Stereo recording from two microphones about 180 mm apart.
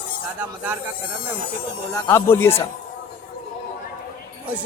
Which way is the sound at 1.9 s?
15° left (ahead or behind).